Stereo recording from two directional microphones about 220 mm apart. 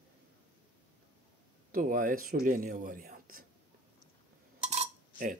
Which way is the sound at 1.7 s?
40° right (ahead or behind).